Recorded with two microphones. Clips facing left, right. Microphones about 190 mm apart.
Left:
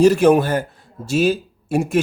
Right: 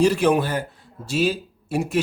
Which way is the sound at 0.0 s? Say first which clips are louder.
Left 5 dB; 45° left (ahead or behind).